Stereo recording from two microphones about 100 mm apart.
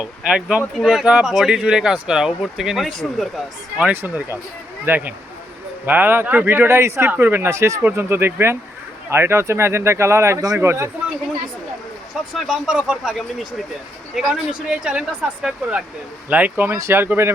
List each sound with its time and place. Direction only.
0.0 s speech: 10° right (ahead or behind)
3.9 s speech: 20° right (ahead or behind)
12.3 s speech: 5° right (ahead or behind)
14.7 s speech: 10° right (ahead or behind)